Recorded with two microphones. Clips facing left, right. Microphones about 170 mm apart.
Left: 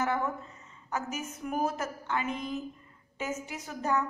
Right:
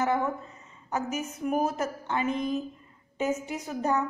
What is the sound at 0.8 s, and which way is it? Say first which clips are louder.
A woman's voice: right 4 dB; 15° right (ahead or behind).